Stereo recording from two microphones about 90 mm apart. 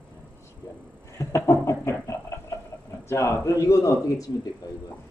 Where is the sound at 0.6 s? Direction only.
30° left (ahead or behind).